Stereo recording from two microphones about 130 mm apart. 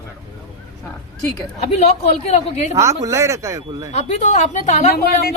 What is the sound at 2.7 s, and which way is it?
Speech, 25° right (ahead or behind).